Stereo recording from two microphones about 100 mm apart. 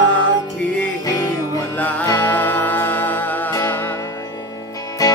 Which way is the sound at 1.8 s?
15° left (ahead or behind).